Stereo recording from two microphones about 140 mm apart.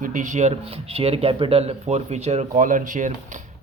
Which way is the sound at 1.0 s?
45° right (ahead or behind).